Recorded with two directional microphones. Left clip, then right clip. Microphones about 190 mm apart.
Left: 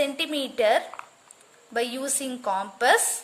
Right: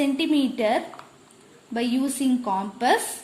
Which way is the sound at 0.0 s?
30° left (ahead or behind).